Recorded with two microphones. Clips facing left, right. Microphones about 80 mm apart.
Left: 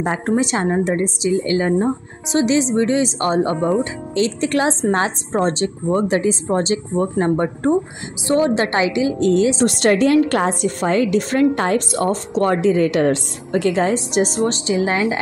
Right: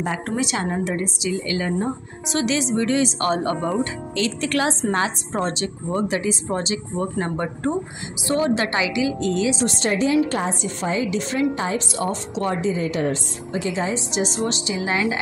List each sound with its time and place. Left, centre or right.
0.0 s a woman's voice: left
9.7 s a woman's voice: left
12.5 s a woman's voice: left
14.4 s a woman's voice: left